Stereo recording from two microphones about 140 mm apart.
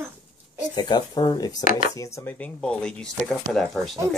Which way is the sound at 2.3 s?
10° left (ahead or behind).